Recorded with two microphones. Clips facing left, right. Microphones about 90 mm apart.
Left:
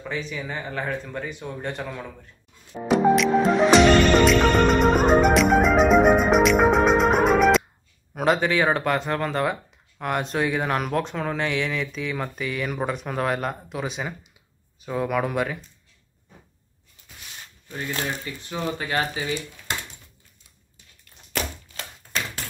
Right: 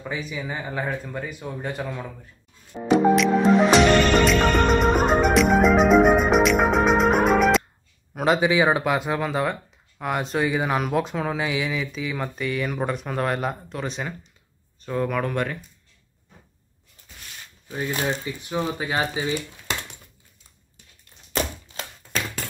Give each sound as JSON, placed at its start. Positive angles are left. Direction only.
{"t": 0.0, "sound": "speech", "side_deg": -10}
{"t": 4.6, "sound": "music", "side_deg": 0}
{"t": 8.1, "sound": "speech", "side_deg": 0}
{"t": 17.6, "sound": "speech", "side_deg": -15}
{"t": 21.3, "sound": "a sound", "side_deg": -25}